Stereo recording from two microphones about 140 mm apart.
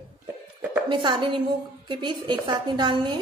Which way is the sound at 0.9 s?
35° right (ahead or behind).